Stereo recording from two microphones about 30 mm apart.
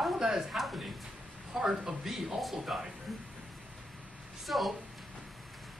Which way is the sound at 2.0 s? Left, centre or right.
Centre.